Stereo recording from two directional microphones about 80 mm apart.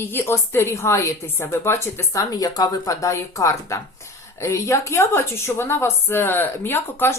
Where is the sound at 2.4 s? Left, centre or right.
Left.